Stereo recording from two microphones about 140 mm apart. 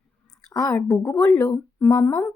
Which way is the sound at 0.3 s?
25° left (ahead or behind).